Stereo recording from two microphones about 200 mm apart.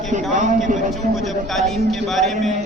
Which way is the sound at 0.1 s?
40° right (ahead or behind).